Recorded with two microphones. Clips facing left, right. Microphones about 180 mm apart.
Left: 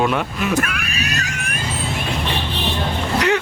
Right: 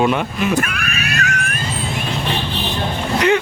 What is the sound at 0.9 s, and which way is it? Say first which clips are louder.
Screaming: right 3 dB; 35° left (ahead or behind).